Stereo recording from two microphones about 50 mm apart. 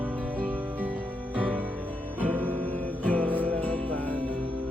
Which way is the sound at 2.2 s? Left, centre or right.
Right.